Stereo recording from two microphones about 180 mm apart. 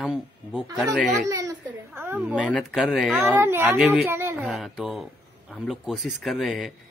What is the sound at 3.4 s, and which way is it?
A child's voice, 10° right (ahead or behind).